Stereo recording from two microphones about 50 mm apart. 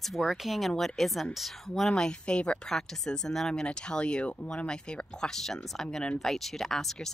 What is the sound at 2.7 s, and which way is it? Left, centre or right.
Speech, centre.